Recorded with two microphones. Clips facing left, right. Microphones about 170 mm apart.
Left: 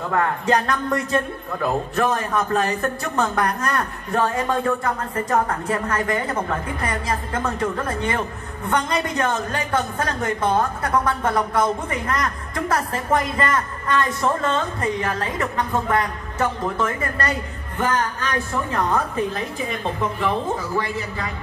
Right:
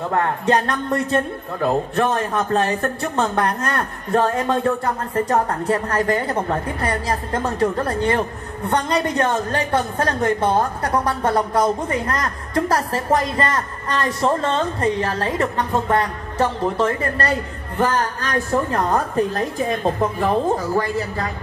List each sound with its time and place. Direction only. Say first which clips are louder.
0.1 s a woman's voice: right 1 dB; 30° right (ahead or behind)